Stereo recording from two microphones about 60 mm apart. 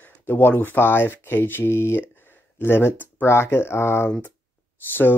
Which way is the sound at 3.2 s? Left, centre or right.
Left.